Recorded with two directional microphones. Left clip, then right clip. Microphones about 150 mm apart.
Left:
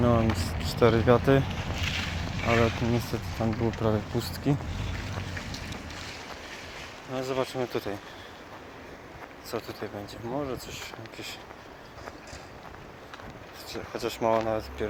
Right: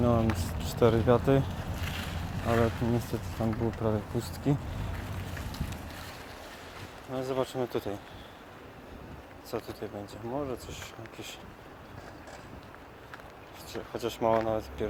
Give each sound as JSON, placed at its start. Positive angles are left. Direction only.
{"t": 0.0, "sound": "a sound", "side_deg": -10}
{"t": 0.3, "sound": "speech", "side_deg": -15}
{"t": 1.5, "sound": "boat", "side_deg": -70}
{"t": 3.1, "sound": "speech", "side_deg": -15}
{"t": 3.8, "sound": "speech", "side_deg": 0}
{"t": 4.9, "sound": "boat", "side_deg": -60}
{"t": 7.1, "sound": "speech", "side_deg": -20}
{"t": 9.5, "sound": "speech", "side_deg": -15}
{"t": 13.7, "sound": "speech", "side_deg": -15}